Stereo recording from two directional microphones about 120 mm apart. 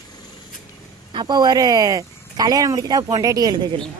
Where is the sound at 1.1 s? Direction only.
35° right (ahead or behind).